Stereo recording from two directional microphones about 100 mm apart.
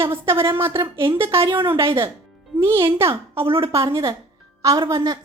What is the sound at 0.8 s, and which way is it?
Speech, 55° right (ahead or behind).